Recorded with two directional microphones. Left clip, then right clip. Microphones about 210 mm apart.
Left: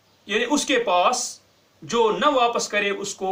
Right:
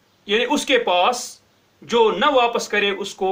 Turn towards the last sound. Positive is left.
turn(degrees=-25)  # may be behind; listen again after turning